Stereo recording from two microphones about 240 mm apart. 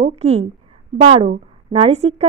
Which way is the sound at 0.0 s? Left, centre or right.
Right.